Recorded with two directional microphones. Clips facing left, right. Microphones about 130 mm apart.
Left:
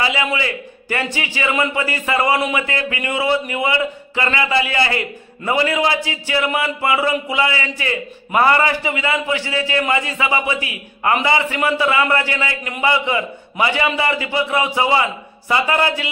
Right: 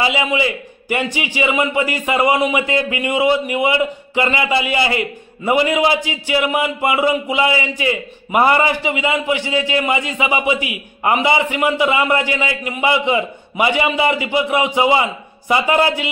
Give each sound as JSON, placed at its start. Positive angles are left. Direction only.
{"t": 0.0, "sound": "a man's voice", "side_deg": -20}